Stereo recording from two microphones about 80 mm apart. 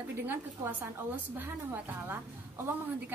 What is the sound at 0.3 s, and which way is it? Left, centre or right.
Speech, right.